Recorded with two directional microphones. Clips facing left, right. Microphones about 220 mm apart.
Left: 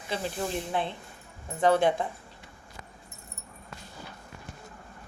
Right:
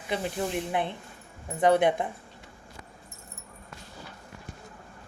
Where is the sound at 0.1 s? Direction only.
20° right (ahead or behind).